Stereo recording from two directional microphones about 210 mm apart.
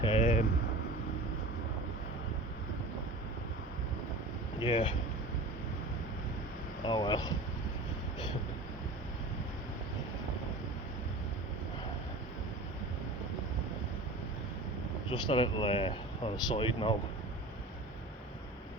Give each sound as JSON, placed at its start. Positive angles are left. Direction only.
{"t": 0.0, "sound": "vehicle", "side_deg": 30}
{"t": 4.6, "sound": "speech", "side_deg": 25}
{"t": 6.8, "sound": "speech", "side_deg": 20}
{"t": 15.1, "sound": "speech", "side_deg": 25}